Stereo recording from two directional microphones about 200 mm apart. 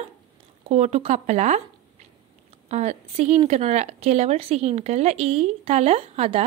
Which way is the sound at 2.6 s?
35° right (ahead or behind).